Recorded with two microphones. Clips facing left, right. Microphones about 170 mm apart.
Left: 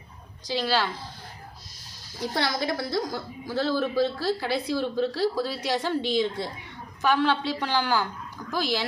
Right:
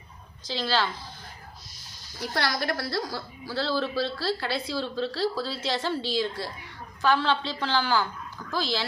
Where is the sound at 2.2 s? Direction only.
20° left (ahead or behind).